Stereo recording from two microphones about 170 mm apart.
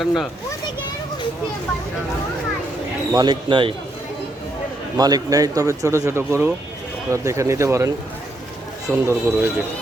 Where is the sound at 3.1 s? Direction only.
25° right (ahead or behind).